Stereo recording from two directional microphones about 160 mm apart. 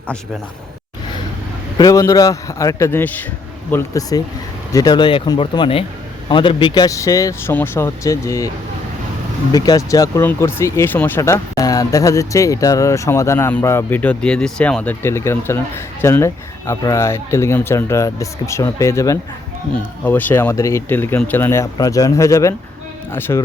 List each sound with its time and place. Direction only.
1.8 s speech: 20° left (ahead or behind)
9.5 s speech: 25° left (ahead or behind)